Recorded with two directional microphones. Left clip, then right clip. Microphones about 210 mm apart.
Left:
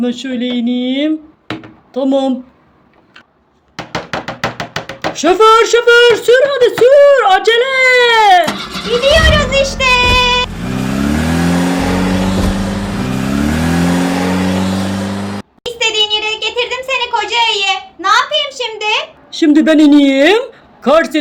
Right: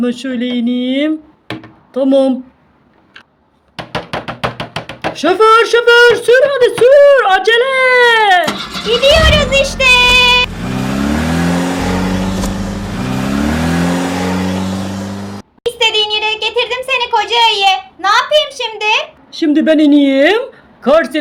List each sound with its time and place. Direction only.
0.0 s speech: 10° right (ahead or behind)
5.1 s speech: centre (ahead or behind)
9.3 s child singing: 40° right (ahead or behind)
10.5 s vehicle: centre (ahead or behind)
15.6 s a child's voice: 40° right (ahead or behind)
19.3 s speech: 10° left (ahead or behind)